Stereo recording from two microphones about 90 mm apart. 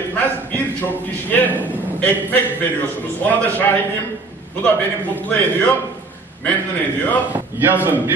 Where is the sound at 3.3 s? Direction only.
15° left (ahead or behind).